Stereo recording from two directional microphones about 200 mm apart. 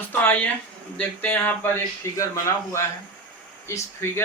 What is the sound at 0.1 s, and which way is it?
Speech, 10° left (ahead or behind).